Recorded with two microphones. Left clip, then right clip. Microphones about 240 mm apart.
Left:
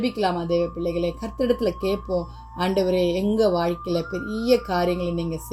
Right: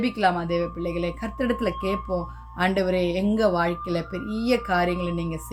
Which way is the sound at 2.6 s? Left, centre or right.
Right.